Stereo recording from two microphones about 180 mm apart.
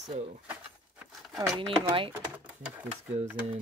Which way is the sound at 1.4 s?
25° right (ahead or behind).